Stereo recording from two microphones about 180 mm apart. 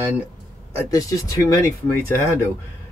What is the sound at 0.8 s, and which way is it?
Speech, 20° left (ahead or behind).